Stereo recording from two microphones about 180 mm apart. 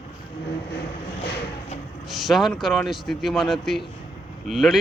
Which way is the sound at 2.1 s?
Centre (ahead or behind).